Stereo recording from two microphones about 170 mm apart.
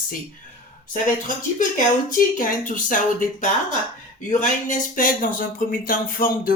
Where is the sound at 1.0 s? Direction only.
50° left (ahead or behind).